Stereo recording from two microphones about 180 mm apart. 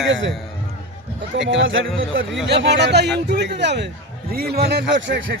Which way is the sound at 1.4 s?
90° right.